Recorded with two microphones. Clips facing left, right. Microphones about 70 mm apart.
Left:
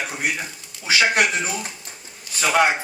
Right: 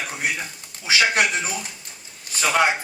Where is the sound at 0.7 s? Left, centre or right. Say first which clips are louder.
Even; right.